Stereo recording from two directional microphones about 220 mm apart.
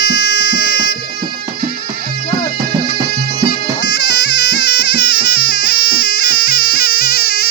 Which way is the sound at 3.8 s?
55° left (ahead or behind).